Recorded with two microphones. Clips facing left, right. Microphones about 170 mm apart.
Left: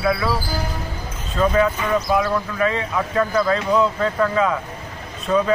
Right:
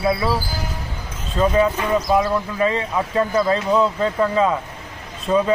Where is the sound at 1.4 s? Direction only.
25° right (ahead or behind).